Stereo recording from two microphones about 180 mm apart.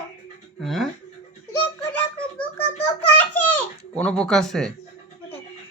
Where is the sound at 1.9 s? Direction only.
5° left (ahead or behind).